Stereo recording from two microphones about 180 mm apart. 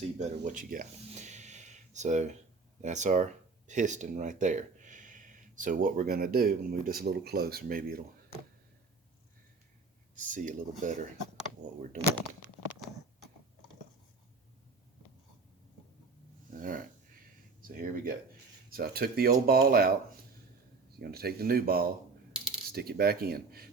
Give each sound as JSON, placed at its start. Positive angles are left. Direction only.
{"t": 0.2, "sound": "speech", "side_deg": -45}
{"t": 10.2, "sound": "speech", "side_deg": -45}
{"t": 16.5, "sound": "a sound", "side_deg": -50}
{"t": 17.6, "sound": "speech", "side_deg": -50}
{"t": 21.0, "sound": "speech", "side_deg": -60}